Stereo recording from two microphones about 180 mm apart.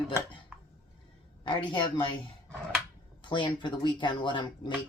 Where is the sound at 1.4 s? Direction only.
25° left (ahead or behind).